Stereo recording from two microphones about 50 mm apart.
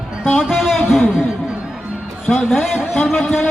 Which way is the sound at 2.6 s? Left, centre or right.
Centre.